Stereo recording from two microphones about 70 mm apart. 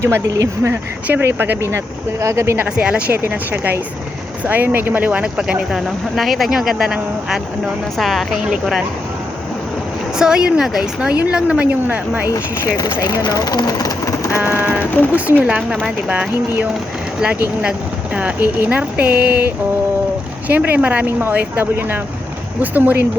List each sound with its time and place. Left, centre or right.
0.3 s speech: right
1.0 s speech: right
2.2 s speech: right
2.6 s a woman's voice: centre
3.2 s speech: right
5.4 s speech: centre
10.2 s a woman's voice: centre
12.3 s speech: left
13.0 s speech: left
14.7 s speech: left
15.1 s speech: right
17.6 s speech: centre